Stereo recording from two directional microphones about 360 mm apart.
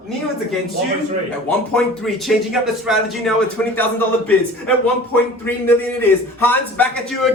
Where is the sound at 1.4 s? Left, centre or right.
Centre.